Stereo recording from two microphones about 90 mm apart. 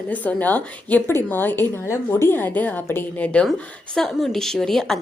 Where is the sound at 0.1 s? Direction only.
15° left (ahead or behind).